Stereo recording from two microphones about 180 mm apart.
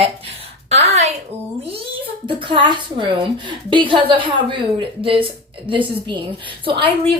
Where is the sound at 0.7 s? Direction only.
35° right (ahead or behind).